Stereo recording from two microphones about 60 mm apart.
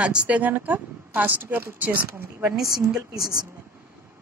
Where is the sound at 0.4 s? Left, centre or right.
Right.